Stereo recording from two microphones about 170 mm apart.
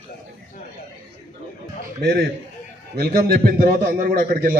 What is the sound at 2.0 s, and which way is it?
A man's voice, 65° right (ahead or behind).